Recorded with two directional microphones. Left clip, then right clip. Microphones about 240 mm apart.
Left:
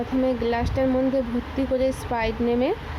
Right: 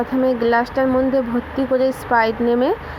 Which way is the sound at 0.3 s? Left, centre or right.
Centre.